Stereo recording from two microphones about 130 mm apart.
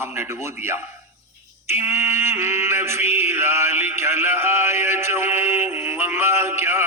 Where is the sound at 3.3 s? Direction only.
15° right (ahead or behind).